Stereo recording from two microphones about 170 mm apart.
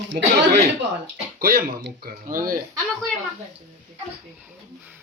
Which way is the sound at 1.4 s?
60° right (ahead or behind).